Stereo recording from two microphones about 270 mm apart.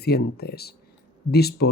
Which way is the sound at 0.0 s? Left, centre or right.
Left.